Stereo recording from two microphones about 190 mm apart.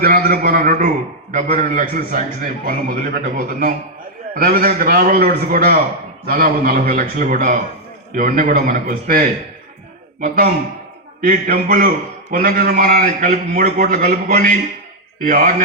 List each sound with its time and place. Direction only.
0.0 s a man's voice: 55° right (ahead or behind)